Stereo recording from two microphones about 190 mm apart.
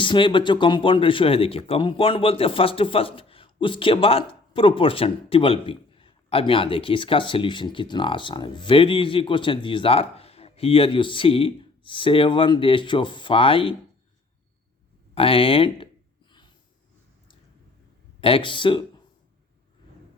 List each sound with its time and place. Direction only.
0.0 s speech: 25° left (ahead or behind)
15.1 s speech: 30° left (ahead or behind)
18.2 s speech: 30° left (ahead or behind)